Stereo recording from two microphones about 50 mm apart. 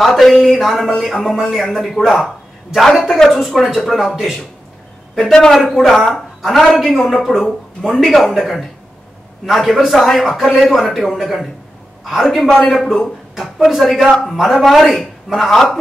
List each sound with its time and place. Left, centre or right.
0.0 s a man's voice: centre
2.2 s a sound: centre
3.0 s a man's voice: centre
5.2 s a man's voice: centre
12.4 s a man's voice: centre